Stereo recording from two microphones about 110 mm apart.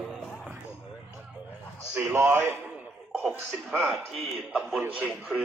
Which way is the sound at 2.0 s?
25° right (ahead or behind).